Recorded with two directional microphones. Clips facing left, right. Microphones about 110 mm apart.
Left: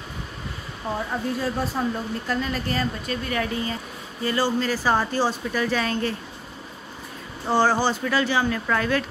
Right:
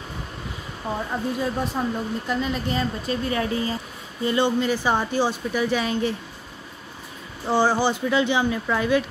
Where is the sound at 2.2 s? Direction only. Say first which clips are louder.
Even; 15° right (ahead or behind).